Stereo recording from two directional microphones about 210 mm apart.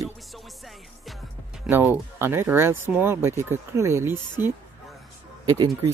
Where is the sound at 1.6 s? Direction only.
10° right (ahead or behind).